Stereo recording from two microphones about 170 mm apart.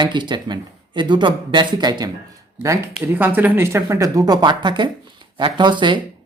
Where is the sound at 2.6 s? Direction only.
15° right (ahead or behind).